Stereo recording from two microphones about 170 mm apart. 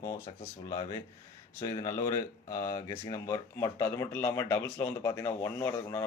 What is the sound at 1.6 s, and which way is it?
Speech, 20° left (ahead or behind).